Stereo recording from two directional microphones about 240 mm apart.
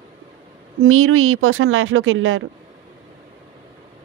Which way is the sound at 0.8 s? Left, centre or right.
Right.